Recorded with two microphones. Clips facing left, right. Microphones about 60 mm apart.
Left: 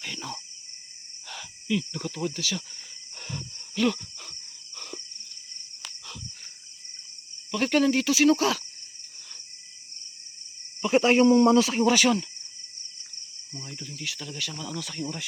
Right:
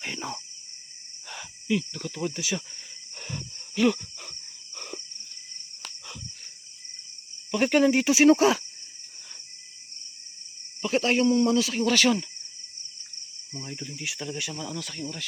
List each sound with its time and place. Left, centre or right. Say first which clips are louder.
0.0 s cricket: right 2 dB; right
1.3 s cricket: right 1 dB; centre
1.9 s speech: left 2 dB; centre
2.1 s speech: right 2 dB; centre
3.2 s a sound: even; centre
7.5 s speech: right 2 dB; centre
10.8 s speech: left 4 dB; centre
11.9 s speech: left 1 dB; centre
13.5 s speech: right 3 dB; centre
14.8 s speech: left 2 dB; centre
15.0 s speech: left 3 dB; centre